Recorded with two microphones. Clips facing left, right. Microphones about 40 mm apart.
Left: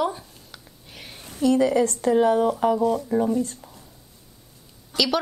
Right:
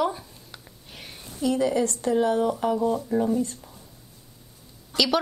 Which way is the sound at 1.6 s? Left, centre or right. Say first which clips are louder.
Left 4 dB; left.